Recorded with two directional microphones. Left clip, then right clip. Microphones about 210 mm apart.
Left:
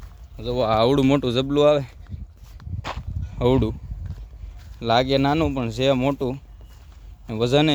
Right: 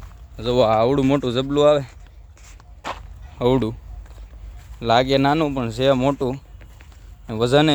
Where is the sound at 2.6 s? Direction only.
15° left (ahead or behind).